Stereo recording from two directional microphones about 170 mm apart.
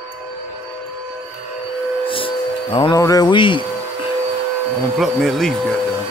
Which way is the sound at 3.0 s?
20° left (ahead or behind).